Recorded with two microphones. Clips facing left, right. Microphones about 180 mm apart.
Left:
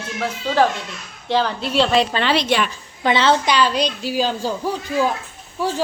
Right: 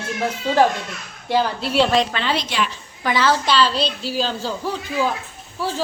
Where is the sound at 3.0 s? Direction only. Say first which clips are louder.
Left 2 dB; 25° left (ahead or behind).